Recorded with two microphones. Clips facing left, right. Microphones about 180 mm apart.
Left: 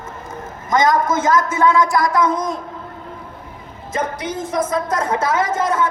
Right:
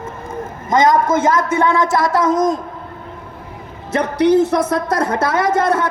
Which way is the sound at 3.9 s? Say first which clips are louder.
Right 10 dB; 70° right (ahead or behind).